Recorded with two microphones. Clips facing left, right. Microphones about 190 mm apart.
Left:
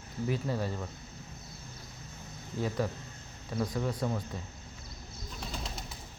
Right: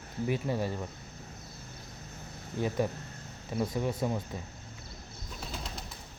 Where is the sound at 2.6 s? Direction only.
15° right (ahead or behind).